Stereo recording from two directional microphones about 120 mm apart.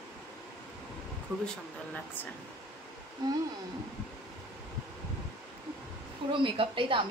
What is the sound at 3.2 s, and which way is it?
Speech, 35° right (ahead or behind).